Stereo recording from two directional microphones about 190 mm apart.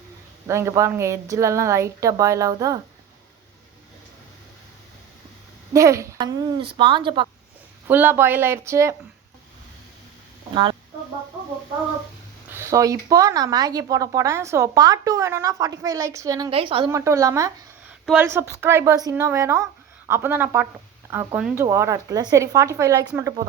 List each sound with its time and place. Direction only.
0.4 s speech: 15° right (ahead or behind)
5.7 s speech: 15° right (ahead or behind)
7.9 s speech: 10° right (ahead or behind)
10.5 s speech: 25° right (ahead or behind)
12.5 s speech: 15° right (ahead or behind)
16.5 s speech: 30° right (ahead or behind)